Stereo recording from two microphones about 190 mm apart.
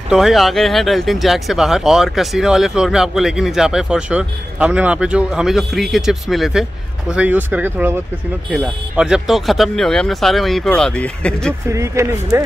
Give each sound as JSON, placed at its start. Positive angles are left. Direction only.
{"t": 0.1, "sound": "speech", "side_deg": 0}
{"t": 11.7, "sound": "speech", "side_deg": -15}